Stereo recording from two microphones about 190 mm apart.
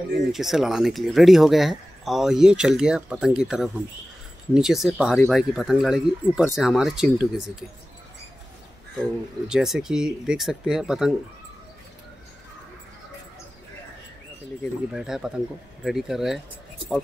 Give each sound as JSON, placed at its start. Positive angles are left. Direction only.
{"t": 0.3, "sound": "speech", "side_deg": 0}
{"t": 9.5, "sound": "speech", "side_deg": -5}
{"t": 14.6, "sound": "speech", "side_deg": 0}